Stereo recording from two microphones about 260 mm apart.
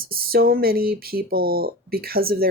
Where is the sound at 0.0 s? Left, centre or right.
Right.